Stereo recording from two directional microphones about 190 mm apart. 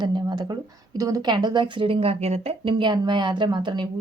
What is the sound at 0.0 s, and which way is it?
A woman's voice, 25° right (ahead or behind).